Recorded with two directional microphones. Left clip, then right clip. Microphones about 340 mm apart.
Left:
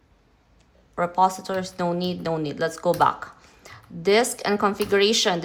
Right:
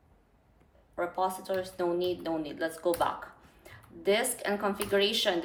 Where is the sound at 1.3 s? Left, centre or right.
Centre.